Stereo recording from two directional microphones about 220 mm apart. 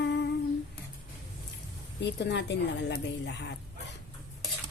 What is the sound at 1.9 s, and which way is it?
Speech, 50° left (ahead or behind).